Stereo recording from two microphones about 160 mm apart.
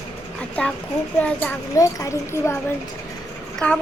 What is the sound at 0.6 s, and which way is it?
A child's voice, 5° left (ahead or behind).